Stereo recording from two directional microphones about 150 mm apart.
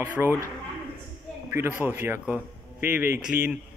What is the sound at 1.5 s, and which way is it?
A man's voice, 15° right (ahead or behind).